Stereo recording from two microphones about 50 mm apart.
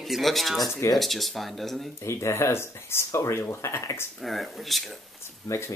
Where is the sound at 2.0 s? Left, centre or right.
Left.